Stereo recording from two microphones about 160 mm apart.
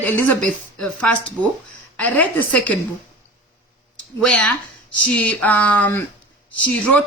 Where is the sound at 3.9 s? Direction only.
5° left (ahead or behind).